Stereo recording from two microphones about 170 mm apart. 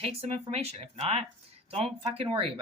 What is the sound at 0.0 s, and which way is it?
Speech, 35° right (ahead or behind).